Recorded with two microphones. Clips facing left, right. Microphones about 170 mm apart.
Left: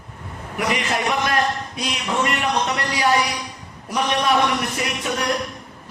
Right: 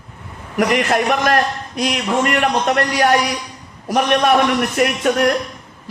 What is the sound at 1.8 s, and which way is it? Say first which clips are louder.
A man's voice: right 7 dB; 65° right (ahead or behind).